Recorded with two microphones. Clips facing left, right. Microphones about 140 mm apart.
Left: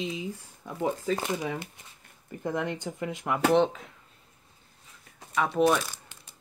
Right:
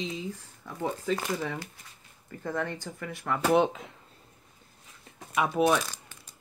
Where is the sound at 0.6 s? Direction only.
15° left (ahead or behind).